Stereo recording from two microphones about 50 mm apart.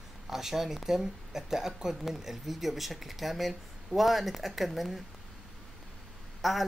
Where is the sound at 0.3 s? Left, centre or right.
Centre.